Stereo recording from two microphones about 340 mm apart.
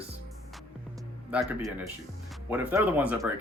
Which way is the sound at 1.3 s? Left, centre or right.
Centre.